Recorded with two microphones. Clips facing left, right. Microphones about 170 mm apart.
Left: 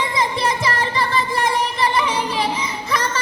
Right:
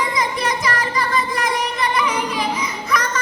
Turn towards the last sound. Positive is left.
turn(degrees=30)  # may be behind; listen again after turning